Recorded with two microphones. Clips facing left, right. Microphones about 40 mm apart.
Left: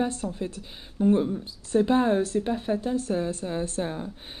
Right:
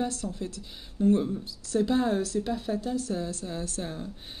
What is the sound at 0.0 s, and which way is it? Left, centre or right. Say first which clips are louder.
Speech: left 3 dB; left.